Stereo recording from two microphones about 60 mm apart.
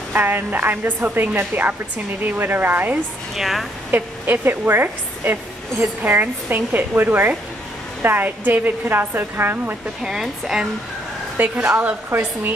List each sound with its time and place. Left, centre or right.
0.1 s a woman's voice: right
3.3 s a woman's voice: centre
3.9 s a woman's voice: right
11.6 s a woman's voice: right